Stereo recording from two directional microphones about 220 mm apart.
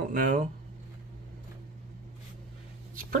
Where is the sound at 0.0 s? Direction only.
40° right (ahead or behind).